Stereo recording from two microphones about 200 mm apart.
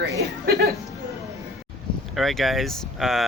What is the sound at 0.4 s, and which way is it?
Music, 50° right (ahead or behind).